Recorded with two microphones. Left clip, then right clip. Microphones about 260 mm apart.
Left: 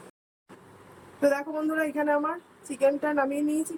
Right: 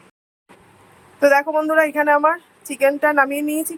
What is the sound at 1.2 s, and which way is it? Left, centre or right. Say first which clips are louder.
A woman's voice: right 11 dB; right.